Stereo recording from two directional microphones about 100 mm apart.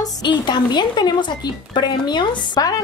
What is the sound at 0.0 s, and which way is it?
A woman's voice, 45° left (ahead or behind).